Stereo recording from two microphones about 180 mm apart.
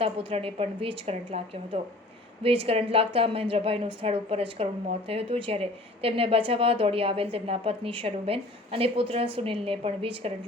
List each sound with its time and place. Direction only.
0.0 s a woman's voice: 30° right (ahead or behind)